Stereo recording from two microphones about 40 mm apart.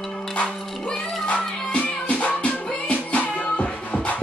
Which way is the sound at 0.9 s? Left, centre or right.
Left.